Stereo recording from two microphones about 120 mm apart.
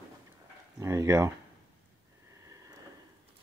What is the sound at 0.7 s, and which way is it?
Speech, 25° right (ahead or behind).